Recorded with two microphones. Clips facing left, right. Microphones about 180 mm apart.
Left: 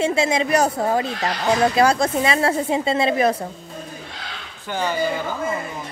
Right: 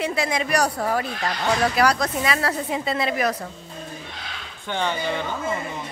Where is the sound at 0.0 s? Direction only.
25° left (ahead or behind).